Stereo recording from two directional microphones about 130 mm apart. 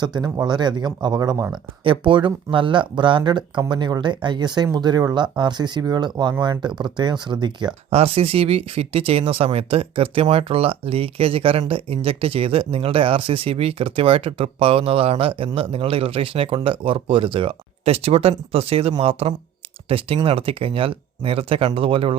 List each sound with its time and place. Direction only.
0.0 s speech: 35° right (ahead or behind)
1.8 s speech: 40° right (ahead or behind)
7.9 s speech: 50° right (ahead or behind)